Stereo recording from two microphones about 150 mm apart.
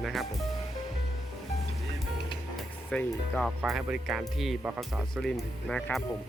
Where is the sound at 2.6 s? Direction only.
5° left (ahead or behind).